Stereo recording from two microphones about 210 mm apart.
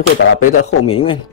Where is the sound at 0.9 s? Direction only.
25° left (ahead or behind).